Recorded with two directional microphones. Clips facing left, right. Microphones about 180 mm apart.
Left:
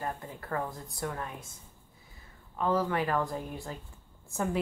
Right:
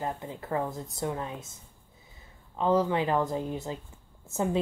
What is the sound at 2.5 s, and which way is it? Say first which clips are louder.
Speech: right 4 dB; 20° right (ahead or behind).